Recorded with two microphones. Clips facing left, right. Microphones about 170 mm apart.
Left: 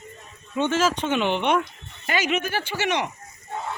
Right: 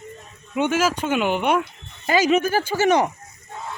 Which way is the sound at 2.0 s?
35° right (ahead or behind).